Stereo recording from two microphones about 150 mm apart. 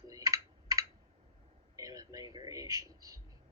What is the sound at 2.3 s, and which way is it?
Speech, 25° right (ahead or behind).